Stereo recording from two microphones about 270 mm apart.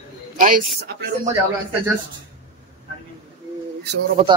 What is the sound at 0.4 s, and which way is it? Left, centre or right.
Speech, right.